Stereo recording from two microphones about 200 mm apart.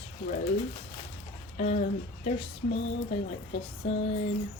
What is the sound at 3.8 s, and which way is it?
Speech, 30° left (ahead or behind).